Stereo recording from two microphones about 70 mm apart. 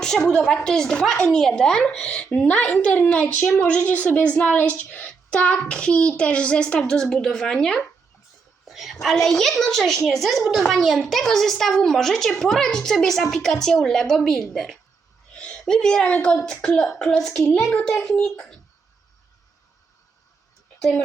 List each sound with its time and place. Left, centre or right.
0.0 s a woman's voice: centre
15.4 s a woman's voice: centre